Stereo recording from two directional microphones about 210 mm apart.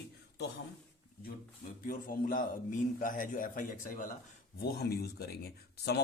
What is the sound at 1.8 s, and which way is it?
A man's voice, 40° left (ahead or behind).